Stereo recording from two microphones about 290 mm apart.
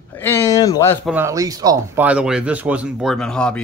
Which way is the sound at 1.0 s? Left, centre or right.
Centre.